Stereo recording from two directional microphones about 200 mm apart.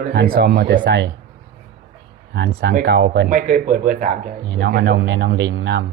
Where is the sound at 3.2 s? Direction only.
40° right (ahead or behind).